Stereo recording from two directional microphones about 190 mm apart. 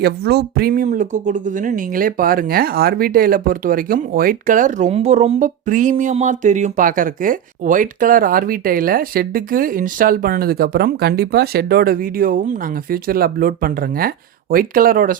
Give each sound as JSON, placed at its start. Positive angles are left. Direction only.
{"t": 0.0, "sound": "speech", "side_deg": -60}